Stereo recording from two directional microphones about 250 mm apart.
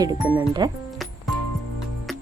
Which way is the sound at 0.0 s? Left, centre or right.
Centre.